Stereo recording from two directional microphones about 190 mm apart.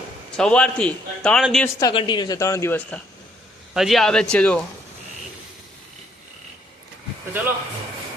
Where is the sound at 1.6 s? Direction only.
20° left (ahead or behind).